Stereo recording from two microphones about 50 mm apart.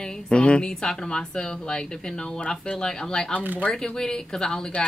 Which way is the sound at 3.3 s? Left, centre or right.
Right.